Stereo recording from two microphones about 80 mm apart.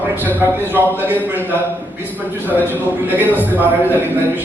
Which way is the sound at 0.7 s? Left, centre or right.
Right.